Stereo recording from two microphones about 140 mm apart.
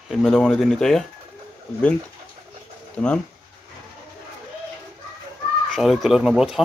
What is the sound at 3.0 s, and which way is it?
Speech, 5° left (ahead or behind).